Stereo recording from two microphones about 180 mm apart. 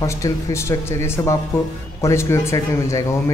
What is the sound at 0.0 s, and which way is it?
Speech, 15° left (ahead or behind).